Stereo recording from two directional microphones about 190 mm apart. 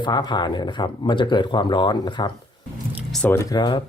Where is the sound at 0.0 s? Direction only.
25° left (ahead or behind).